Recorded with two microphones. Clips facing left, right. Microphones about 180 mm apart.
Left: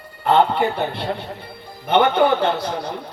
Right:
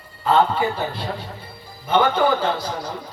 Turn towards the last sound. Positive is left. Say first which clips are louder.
# left 3 dB
turn(degrees=65)  # may be behind; listen again after turning